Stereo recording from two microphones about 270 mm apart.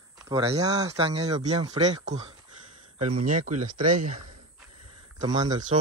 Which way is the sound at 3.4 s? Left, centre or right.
Right.